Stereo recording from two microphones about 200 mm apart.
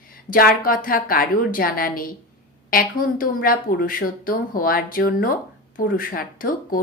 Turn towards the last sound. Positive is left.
turn(degrees=45)  # may be behind; listen again after turning